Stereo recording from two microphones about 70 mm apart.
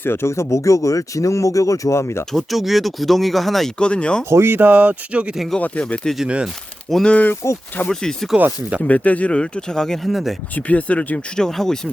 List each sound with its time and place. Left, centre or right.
0.0 s speech: left
2.3 s speech: centre
3.8 s speech: centre
4.3 s speech: right; by 5.3 s centre
5.3 s speech: centre
5.5 s speech: centre
6.2 s speech: centre
7.1 s speech: left
7.9 s speech: centre
8.4 s speech: right
8.8 s speech: left; by 10.3 s centre
10.5 s speech: left
11.4 s speech: centre